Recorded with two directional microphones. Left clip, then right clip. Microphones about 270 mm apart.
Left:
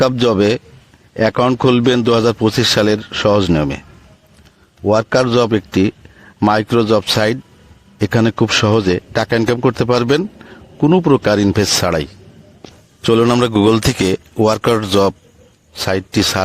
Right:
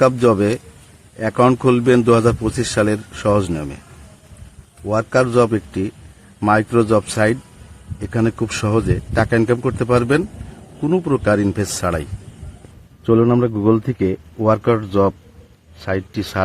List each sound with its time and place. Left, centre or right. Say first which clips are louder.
0.0 s speech: left 1 dB; left
4.9 s speech: left 4 dB; left